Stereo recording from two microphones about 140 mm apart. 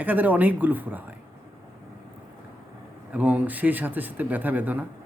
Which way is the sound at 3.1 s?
10° right (ahead or behind).